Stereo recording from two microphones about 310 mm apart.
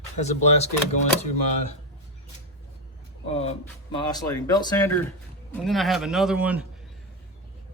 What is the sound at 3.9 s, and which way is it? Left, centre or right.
Speech, centre.